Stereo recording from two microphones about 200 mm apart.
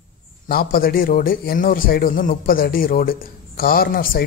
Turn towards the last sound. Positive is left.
turn(degrees=45)  # may be behind; listen again after turning